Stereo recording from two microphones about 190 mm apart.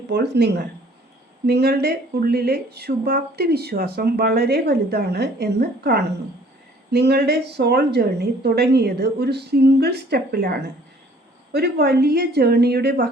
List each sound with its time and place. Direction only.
0.1 s speech: 60° right (ahead or behind)